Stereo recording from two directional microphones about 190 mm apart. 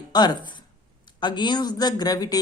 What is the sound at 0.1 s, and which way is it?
Speech, 20° left (ahead or behind).